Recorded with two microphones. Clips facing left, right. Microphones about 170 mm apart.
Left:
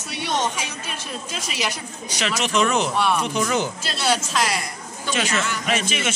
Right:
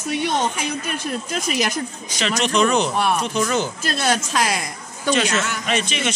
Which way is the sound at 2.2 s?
5° left (ahead or behind).